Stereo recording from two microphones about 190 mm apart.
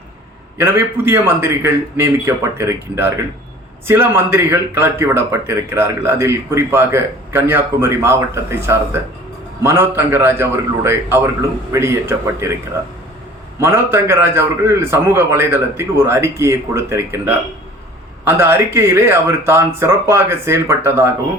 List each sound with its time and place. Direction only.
0.6 s a man's voice: 10° right (ahead or behind)
13.6 s a man's voice: 10° right (ahead or behind)